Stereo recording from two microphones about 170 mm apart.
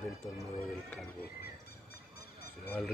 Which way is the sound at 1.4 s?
65° left (ahead or behind).